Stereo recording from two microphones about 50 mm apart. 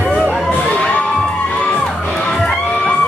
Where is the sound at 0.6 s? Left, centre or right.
Left.